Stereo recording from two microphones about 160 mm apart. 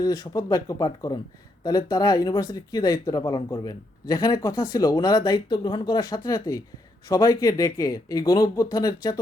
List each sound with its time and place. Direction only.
0.0 s speech: 20° left (ahead or behind)